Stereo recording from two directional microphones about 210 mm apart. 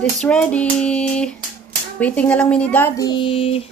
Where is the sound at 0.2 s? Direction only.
5° left (ahead or behind).